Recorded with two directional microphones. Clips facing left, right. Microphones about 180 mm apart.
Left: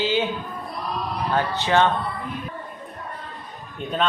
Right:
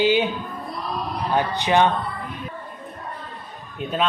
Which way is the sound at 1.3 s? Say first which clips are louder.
Right 1 dB; 15° right (ahead or behind).